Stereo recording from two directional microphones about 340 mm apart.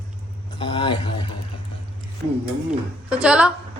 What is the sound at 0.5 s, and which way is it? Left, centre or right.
Speech, centre.